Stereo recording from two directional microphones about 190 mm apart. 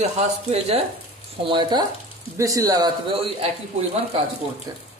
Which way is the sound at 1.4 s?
25° right (ahead or behind).